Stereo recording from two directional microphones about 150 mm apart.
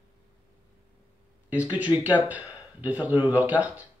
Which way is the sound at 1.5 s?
10° right (ahead or behind).